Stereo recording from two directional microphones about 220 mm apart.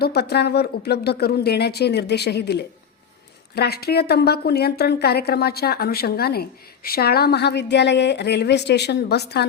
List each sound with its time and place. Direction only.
0.0 s a woman's voice: 45° left (ahead or behind)